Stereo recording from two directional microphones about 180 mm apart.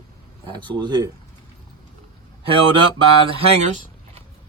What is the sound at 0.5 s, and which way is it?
Speech, 25° right (ahead or behind).